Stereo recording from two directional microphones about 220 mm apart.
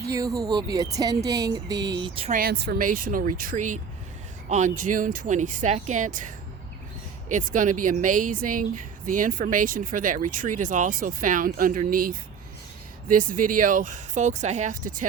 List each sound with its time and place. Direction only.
0.3 s speech: 15° right (ahead or behind)
2.3 s speech: 45° right (ahead or behind)
7.3 s speech: 35° right (ahead or behind)